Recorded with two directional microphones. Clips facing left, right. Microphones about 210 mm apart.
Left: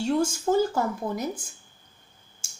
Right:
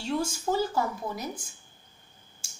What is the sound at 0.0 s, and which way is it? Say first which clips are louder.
Speech: left 5 dB; 50° left (ahead or behind).